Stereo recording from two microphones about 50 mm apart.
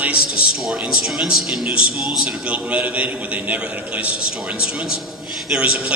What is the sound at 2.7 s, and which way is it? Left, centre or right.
A man's voice, right.